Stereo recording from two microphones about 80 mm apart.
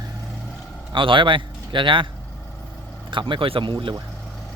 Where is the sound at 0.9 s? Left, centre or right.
Right.